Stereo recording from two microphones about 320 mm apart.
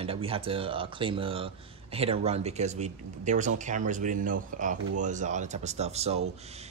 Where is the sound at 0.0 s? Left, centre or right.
Centre.